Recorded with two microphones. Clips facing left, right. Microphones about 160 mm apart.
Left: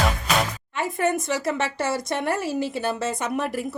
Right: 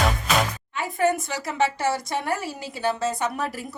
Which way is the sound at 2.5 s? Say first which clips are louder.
Left 2 dB; 60° left (ahead or behind).